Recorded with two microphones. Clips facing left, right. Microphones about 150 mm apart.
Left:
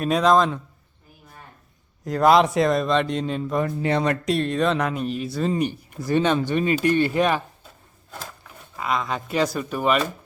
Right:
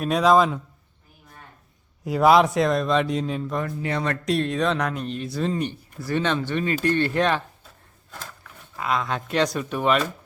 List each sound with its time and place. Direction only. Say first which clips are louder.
0.0 s speech: even; centre (ahead or behind)
2.0 s speech: even; 5° right (ahead or behind)
3.6 s speech: left 5 dB; 25° left (ahead or behind)
4.3 s speech: right 2 dB; centre (ahead or behind)
8.7 s speech: even; centre (ahead or behind)